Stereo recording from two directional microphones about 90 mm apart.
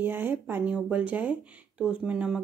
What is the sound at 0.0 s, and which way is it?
Speech, 20° right (ahead or behind).